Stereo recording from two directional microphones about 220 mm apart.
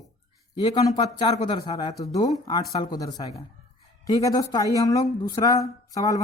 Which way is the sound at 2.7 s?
20° left (ahead or behind).